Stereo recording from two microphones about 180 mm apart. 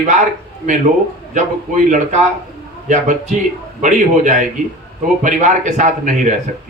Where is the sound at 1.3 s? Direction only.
45° right (ahead or behind).